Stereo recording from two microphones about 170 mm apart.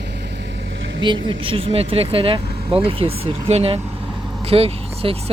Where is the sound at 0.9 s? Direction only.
30° right (ahead or behind).